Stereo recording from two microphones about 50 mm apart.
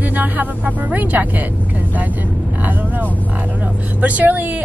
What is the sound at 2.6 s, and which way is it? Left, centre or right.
Speech, right.